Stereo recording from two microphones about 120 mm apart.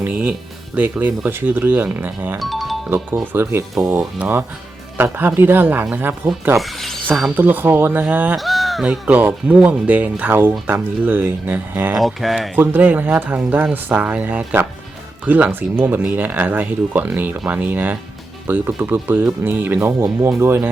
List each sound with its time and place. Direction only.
0.0 s speech: 15° right (ahead or behind)
2.4 s music: centre (ahead or behind)
3.3 s speech: 20° right (ahead or behind)
6.6 s speech: centre (ahead or behind)
7.3 s speech: 15° right (ahead or behind)
8.4 s speech: centre (ahead or behind); by 11.9 s 15° right (ahead or behind)
11.9 s speech: centre (ahead or behind)
12.5 s speech: 15° right (ahead or behind)